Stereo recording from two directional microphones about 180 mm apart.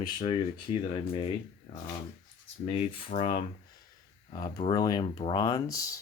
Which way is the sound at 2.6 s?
30° left (ahead or behind).